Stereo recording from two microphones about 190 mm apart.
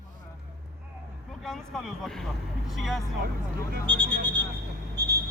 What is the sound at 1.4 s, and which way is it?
Vehicle, centre (ahead or behind).